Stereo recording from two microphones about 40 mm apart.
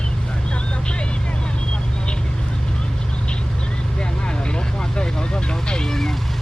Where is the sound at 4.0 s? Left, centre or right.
Left.